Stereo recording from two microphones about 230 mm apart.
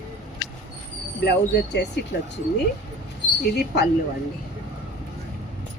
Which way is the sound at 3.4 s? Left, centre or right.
Left.